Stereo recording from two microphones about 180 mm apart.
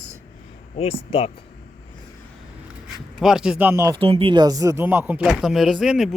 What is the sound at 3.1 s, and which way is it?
Speech, centre (ahead or behind).